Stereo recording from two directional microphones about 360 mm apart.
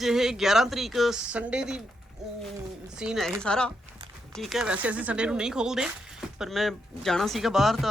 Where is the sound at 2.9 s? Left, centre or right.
Centre.